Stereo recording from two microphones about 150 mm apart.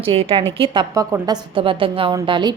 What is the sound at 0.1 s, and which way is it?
A woman's voice, 40° right (ahead or behind).